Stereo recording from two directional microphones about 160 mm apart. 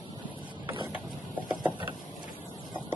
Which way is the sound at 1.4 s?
10° right (ahead or behind).